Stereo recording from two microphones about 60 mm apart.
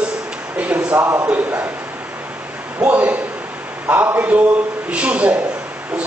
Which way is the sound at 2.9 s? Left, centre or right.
Right.